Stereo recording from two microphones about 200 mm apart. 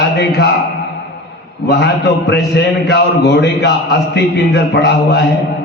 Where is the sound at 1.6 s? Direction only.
55° left (ahead or behind).